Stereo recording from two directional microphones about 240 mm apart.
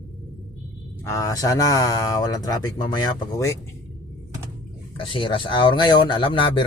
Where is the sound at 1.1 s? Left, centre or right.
Centre.